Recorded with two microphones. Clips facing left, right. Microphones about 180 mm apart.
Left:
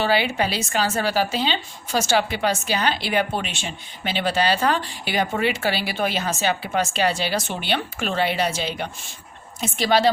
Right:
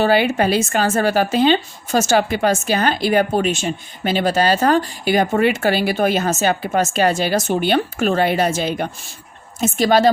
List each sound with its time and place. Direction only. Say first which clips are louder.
0.0 s a woman's voice: right 6 dB; 50° right (ahead or behind)